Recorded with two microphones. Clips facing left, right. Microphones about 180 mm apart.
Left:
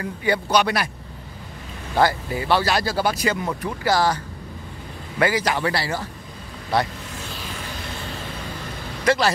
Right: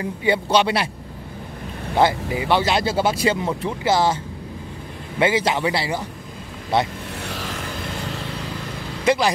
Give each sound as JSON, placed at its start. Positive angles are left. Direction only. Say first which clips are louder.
{"t": 0.0, "sound": "speech", "louder": "right 2 dB", "side_deg": -25}
{"t": 2.0, "sound": "speech", "louder": "right 1 dB", "side_deg": -20}
{"t": 5.2, "sound": "speech", "louder": "right 2 dB", "side_deg": -25}
{"t": 7.2, "sound": "a sound", "louder": "right 5 dB", "side_deg": -75}
{"t": 9.0, "sound": "speech", "louder": "right 1 dB", "side_deg": -15}